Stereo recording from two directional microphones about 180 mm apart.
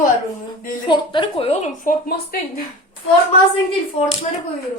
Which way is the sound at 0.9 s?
25° left (ahead or behind).